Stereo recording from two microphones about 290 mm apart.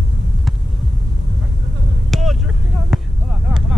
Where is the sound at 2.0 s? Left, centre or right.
Centre.